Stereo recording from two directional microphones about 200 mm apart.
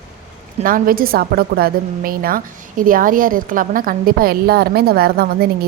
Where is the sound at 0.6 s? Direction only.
45° right (ahead or behind).